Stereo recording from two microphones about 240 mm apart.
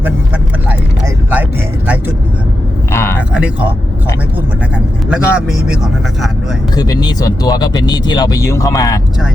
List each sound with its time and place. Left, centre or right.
0.7 s speech: centre
2.9 s speech: centre
3.3 s speech: centre
5.0 s speech: centre
6.7 s speech: centre